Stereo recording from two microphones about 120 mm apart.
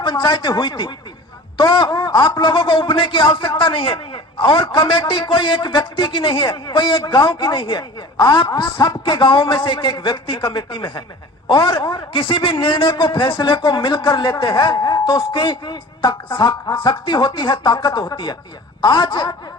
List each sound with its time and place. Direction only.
0.0 s a man's voice: 40° left (ahead or behind)